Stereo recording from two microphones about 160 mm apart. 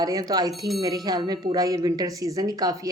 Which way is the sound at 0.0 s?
25° right (ahead or behind).